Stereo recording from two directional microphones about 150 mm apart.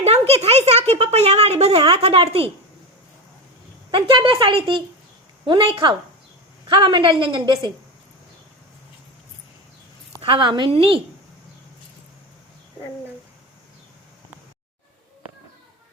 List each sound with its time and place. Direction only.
0.0 s a woman's voice: 45° right (ahead or behind)
3.9 s a woman's voice: 35° right (ahead or behind)
10.2 s a woman's voice: 35° right (ahead or behind)